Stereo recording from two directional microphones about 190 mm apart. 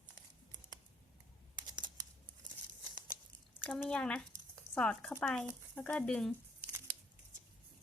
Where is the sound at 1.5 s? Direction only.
20° right (ahead or behind).